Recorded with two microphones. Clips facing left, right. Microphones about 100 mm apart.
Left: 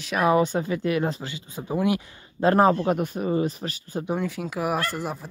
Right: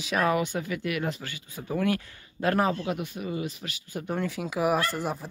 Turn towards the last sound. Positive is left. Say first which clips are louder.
# even
turn(degrees=5)  # may be behind; listen again after turning